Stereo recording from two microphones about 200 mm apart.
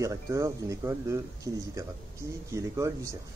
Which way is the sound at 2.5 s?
15° right (ahead or behind).